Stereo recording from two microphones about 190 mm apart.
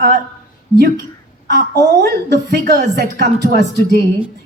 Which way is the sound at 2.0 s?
60° right (ahead or behind).